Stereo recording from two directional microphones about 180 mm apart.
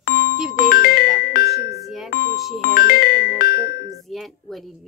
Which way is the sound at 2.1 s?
50° left (ahead or behind).